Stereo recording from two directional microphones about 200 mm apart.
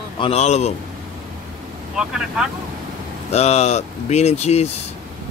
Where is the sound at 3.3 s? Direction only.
35° left (ahead or behind).